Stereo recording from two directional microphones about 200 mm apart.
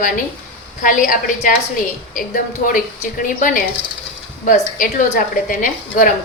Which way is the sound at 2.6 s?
45° left (ahead or behind).